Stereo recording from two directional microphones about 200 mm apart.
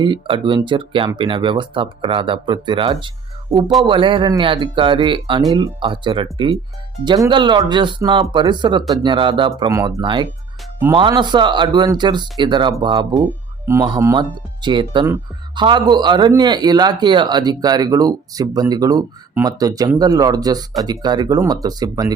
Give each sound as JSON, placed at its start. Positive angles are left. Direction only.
{"t": 0.0, "sound": "a man's voice", "side_deg": -25}